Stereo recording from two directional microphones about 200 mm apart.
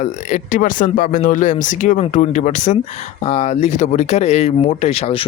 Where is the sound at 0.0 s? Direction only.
40° left (ahead or behind).